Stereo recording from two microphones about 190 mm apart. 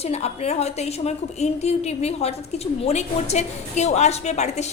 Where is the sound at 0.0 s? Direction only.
35° left (ahead or behind).